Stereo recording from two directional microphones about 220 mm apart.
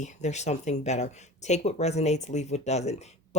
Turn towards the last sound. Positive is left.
turn(degrees=30)  # may be behind; listen again after turning